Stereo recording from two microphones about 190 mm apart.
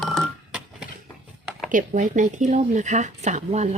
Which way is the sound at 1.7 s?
40° right (ahead or behind).